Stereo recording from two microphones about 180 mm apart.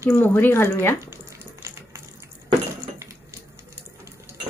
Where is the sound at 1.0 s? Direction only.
15° right (ahead or behind).